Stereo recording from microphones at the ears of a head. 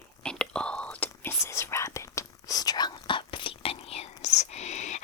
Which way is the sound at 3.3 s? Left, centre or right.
Left.